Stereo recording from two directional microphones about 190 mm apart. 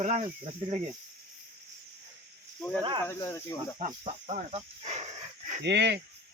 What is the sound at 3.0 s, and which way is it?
Speech, 15° left (ahead or behind).